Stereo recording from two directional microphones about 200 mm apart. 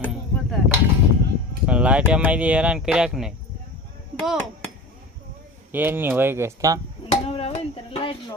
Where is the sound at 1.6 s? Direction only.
5° right (ahead or behind).